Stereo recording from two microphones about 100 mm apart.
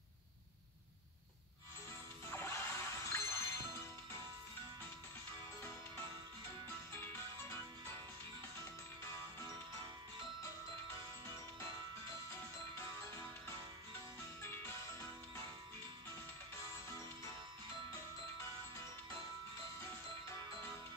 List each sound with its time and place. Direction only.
2.2 s music: 25° left (ahead or behind)
6.7 s music: 20° left (ahead or behind)
11.2 s music: 25° left (ahead or behind)
18.4 s music: 30° left (ahead or behind)